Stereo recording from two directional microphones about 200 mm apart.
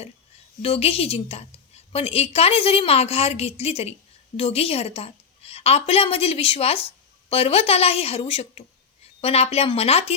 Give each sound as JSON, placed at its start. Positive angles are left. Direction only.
{"t": 0.6, "sound": "a woman's voice", "side_deg": 30}